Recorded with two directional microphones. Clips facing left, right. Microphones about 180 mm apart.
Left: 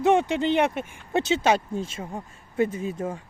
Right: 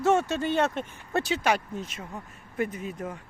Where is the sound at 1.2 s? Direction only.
25° left (ahead or behind).